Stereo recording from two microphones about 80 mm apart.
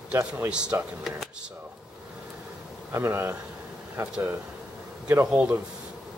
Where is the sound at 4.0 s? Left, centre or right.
Right.